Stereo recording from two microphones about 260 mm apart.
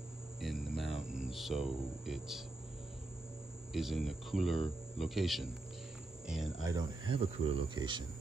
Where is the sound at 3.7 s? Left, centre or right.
Centre.